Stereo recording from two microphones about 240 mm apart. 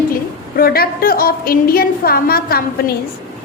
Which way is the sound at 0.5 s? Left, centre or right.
Left.